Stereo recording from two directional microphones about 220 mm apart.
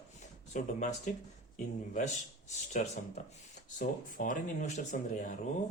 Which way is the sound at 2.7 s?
30° left (ahead or behind).